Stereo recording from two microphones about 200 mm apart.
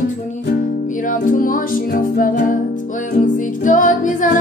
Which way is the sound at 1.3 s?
45° left (ahead or behind).